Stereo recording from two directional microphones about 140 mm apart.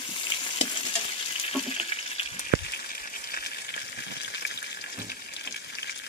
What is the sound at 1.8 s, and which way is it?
Frying, 45° left (ahead or behind).